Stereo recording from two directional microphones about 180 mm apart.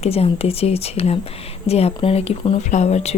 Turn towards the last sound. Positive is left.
turn(degrees=35)  # may be behind; listen again after turning